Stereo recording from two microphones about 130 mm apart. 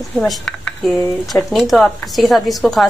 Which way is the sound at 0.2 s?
10° left (ahead or behind).